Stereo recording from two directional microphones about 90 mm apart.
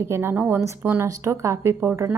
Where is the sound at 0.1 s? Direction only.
25° right (ahead or behind).